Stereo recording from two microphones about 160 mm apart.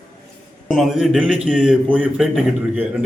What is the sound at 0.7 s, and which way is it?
A man's voice, centre (ahead or behind).